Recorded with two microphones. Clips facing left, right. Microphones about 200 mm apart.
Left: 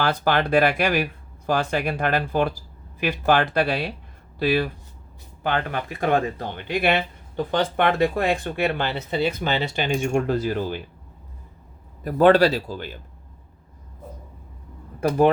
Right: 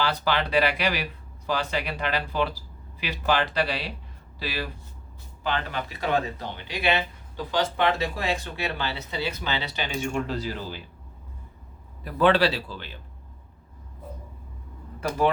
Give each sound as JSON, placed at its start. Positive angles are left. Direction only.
{"t": 0.0, "sound": "speech", "side_deg": 50}
{"t": 12.0, "sound": "speech", "side_deg": 45}